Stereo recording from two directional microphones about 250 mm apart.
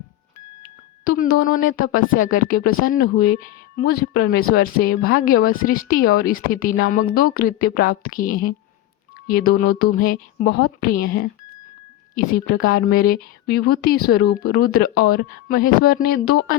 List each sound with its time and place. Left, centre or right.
1.0 s speech: left